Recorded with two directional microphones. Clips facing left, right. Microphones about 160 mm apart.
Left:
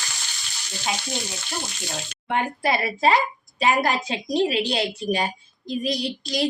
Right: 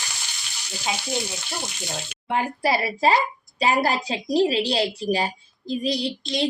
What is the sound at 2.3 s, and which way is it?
A woman's voice, 35° right (ahead or behind).